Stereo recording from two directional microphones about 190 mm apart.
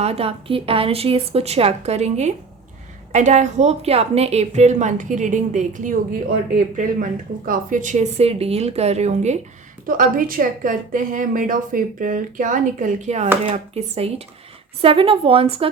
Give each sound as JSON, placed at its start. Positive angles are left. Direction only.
{"t": 0.0, "sound": "a woman's voice", "side_deg": -30}
{"t": 9.8, "sound": "a woman's voice", "side_deg": -45}